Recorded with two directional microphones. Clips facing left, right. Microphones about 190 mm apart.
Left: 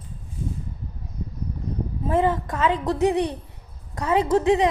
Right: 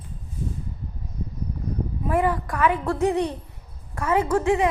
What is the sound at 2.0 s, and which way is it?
A woman's voice, 25° left (ahead or behind).